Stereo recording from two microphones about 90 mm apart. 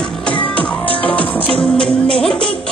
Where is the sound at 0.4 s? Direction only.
15° left (ahead or behind).